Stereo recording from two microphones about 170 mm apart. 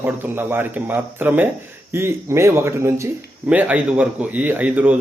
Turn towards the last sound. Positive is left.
turn(degrees=-10)  # may be behind; listen again after turning